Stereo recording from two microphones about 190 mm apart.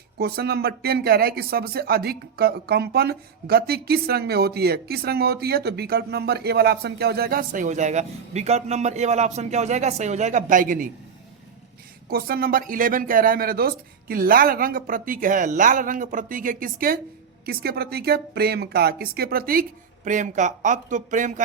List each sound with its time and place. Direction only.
0.2 s speech: 55° right (ahead or behind)
12.0 s speech: 50° right (ahead or behind)